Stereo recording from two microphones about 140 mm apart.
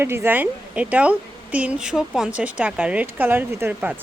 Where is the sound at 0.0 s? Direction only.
15° right (ahead or behind).